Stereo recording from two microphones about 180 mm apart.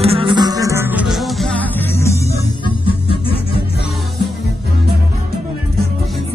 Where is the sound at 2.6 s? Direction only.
30° left (ahead or behind).